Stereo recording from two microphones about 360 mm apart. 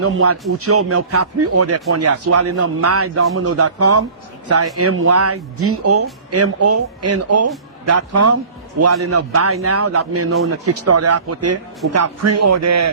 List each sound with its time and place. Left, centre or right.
0.0 s speech: right